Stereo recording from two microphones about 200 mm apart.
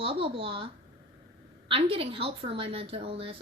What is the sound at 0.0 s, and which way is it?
A woman's voice, 25° right (ahead or behind).